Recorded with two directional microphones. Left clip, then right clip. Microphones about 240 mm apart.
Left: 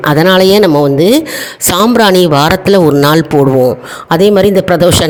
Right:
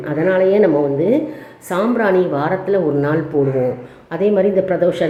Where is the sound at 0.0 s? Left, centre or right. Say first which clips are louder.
Left 8 dB; left.